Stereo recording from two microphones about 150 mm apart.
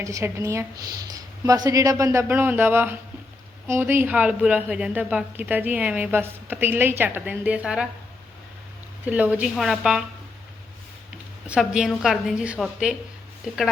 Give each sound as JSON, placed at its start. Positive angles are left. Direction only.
{"t": 0.0, "sound": "a woman's voice", "side_deg": -20}
{"t": 9.0, "sound": "a woman's voice", "side_deg": -10}
{"t": 11.4, "sound": "a woman's voice", "side_deg": -5}